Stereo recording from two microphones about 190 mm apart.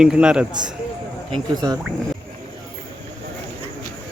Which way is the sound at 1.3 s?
25° right (ahead or behind).